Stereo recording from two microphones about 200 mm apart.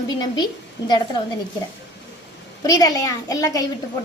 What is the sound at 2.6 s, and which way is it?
A child's voice, 20° left (ahead or behind).